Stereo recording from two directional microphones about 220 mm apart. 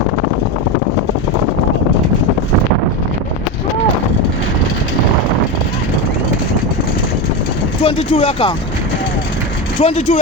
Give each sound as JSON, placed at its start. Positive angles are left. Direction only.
{"t": 7.9, "sound": "speech", "side_deg": 25}
{"t": 9.8, "sound": "speech", "side_deg": 25}